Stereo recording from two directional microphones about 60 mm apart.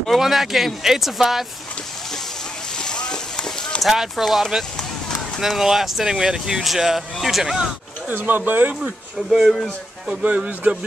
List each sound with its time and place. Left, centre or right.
0.0 s speech: centre
2.8 s run: centre
3.8 s speech: centre
8.1 s speech: right
8.8 s speech: centre